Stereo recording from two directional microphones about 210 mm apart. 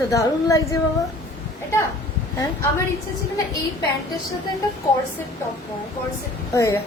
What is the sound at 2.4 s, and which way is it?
Speech, 15° left (ahead or behind).